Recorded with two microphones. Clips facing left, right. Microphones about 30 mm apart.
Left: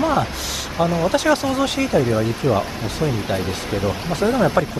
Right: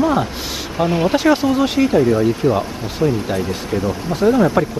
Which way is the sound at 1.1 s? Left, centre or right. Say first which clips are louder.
Right 4 dB; centre.